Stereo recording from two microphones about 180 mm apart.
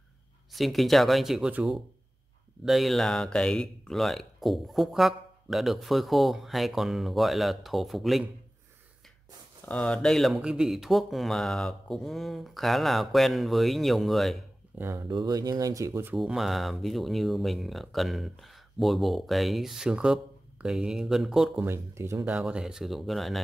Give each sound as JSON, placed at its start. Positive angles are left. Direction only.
{"t": 0.5, "sound": "speech", "side_deg": 0}
{"t": 9.7, "sound": "speech", "side_deg": 5}
{"t": 14.8, "sound": "speech", "side_deg": -15}
{"t": 16.2, "sound": "speech", "side_deg": 0}
{"t": 21.6, "sound": "speech", "side_deg": -15}